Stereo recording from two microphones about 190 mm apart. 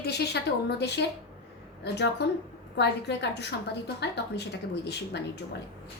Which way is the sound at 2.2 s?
60° left (ahead or behind).